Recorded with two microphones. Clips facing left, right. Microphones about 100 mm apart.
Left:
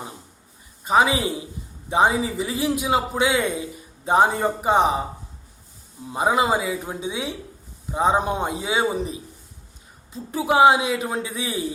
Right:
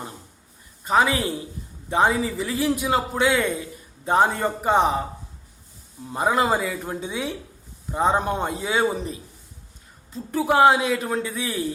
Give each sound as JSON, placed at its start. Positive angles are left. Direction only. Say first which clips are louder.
{"t": 0.9, "sound": "a man's voice", "louder": "left 1 dB", "side_deg": 10}
{"t": 6.1, "sound": "a man's voice", "louder": "left 1 dB", "side_deg": 10}